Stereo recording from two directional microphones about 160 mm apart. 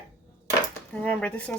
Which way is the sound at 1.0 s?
10° left (ahead or behind).